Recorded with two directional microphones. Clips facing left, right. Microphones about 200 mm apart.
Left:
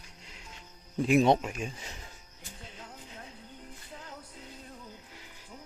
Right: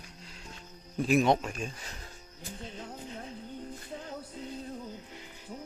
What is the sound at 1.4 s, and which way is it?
Speech, 15° left (ahead or behind).